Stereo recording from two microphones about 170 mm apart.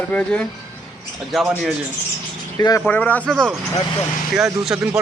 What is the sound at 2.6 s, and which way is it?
Speech, 20° left (ahead or behind).